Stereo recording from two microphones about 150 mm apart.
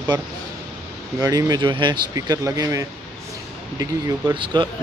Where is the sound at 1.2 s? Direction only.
25° right (ahead or behind).